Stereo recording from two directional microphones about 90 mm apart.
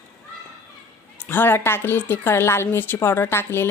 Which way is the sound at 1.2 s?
25° left (ahead or behind).